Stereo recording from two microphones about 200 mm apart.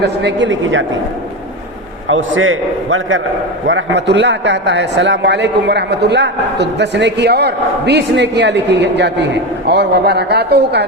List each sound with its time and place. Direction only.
0.0 s speech: 60° right (ahead or behind)
2.0 s a man's voice: 80° right
3.7 s a man's voice: 65° right (ahead or behind)